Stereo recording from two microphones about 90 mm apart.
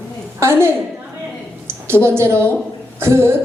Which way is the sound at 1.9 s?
30° right (ahead or behind).